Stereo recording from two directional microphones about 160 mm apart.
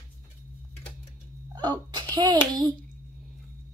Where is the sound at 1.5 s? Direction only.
25° right (ahead or behind).